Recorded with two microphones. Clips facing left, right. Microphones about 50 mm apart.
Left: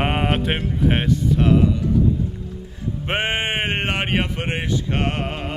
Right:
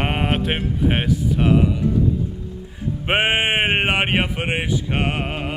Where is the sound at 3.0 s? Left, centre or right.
Centre.